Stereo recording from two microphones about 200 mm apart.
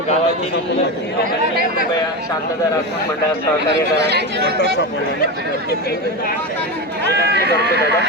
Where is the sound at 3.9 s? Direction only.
55° right (ahead or behind).